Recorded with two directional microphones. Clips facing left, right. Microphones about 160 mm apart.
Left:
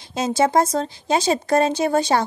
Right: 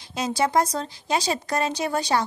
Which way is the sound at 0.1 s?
25° left (ahead or behind).